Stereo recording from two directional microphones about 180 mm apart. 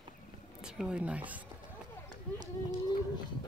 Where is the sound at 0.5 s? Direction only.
5° right (ahead or behind).